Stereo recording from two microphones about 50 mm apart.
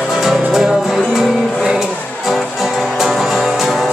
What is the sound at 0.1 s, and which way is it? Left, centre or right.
Music, centre.